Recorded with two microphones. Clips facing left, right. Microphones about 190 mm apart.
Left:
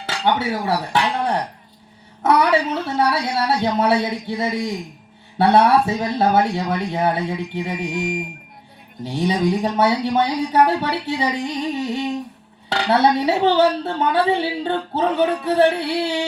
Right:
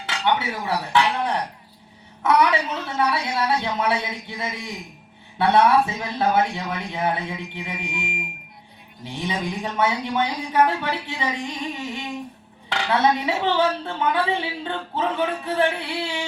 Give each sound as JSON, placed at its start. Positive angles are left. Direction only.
{"t": 0.0, "sound": "speech", "side_deg": 40}